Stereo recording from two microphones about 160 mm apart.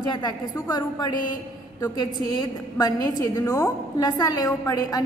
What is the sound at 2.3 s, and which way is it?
A woman's voice, 25° left (ahead or behind).